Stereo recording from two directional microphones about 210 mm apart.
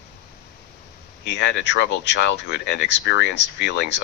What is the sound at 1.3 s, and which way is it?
Speech, 55° left (ahead or behind).